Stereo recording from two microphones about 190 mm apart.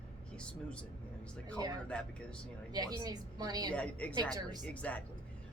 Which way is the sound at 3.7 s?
5° left (ahead or behind).